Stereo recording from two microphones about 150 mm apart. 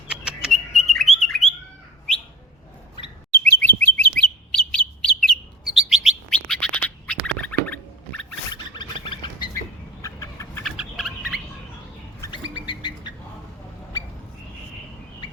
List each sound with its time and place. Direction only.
0.1 s bird: 5° right (ahead or behind)
3.4 s bird: 10° left (ahead or behind)
8.7 s a sound: 30° left (ahead or behind)
9.6 s chicken: 20° left (ahead or behind)
10.6 s rodents: centre (ahead or behind)
12.3 s bird: 30° left (ahead or behind)